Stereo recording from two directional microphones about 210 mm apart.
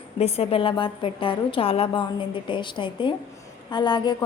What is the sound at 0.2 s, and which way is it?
A woman's voice, 30° left (ahead or behind).